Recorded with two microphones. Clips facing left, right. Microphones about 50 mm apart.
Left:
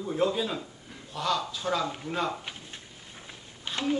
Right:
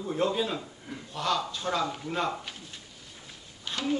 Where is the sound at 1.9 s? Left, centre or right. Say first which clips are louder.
Even; centre.